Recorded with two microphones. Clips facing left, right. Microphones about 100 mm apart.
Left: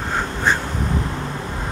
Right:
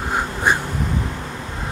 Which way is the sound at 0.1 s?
10° right (ahead or behind).